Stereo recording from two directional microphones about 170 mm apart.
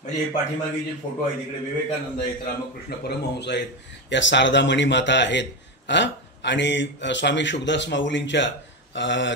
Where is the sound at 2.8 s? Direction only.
75° left (ahead or behind).